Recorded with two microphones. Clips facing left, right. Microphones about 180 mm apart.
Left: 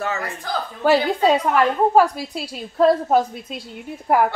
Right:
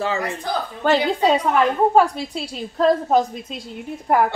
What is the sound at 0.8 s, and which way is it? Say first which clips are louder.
A woman's voice: left 1 dB; 5° left (ahead or behind).